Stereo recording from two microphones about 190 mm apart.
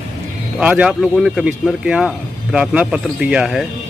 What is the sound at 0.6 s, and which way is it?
A woman's voice, 5° right (ahead or behind).